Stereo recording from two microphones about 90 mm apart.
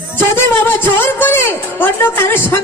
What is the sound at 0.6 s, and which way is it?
A woman's voice, 20° left (ahead or behind).